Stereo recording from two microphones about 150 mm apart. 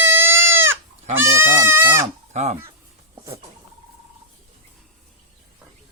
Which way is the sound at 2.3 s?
50° right (ahead or behind).